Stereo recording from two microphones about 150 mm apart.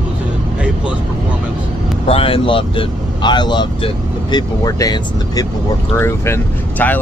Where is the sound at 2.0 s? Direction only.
40° left (ahead or behind).